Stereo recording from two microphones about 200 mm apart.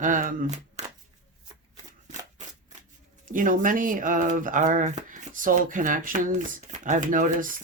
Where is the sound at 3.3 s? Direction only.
40° right (ahead or behind).